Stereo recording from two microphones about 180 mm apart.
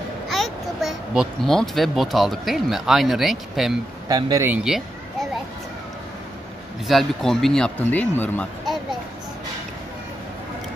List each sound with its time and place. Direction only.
0.3 s a child's voice: centre (ahead or behind)
4.1 s speech: 20° right (ahead or behind)
4.5 s children playing: centre (ahead or behind)
6.9 s speech: centre (ahead or behind)